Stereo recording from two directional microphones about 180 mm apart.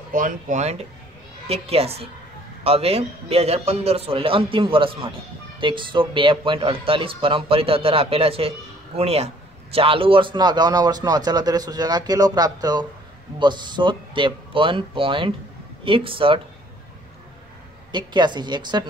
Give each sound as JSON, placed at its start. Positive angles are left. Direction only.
{"t": 0.1, "sound": "a man's voice", "side_deg": -50}
{"t": 17.9, "sound": "speech", "side_deg": -25}